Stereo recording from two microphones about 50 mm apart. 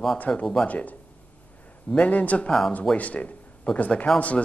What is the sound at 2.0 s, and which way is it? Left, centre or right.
Speech, left.